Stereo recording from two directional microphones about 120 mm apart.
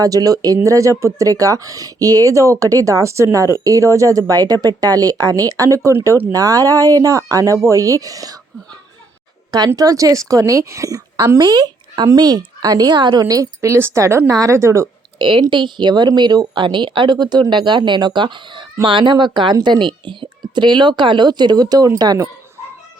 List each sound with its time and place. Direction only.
0.0 s a woman's voice: 30° right (ahead or behind)
9.6 s a woman's voice: 30° right (ahead or behind)
15.2 s speech: 40° right (ahead or behind)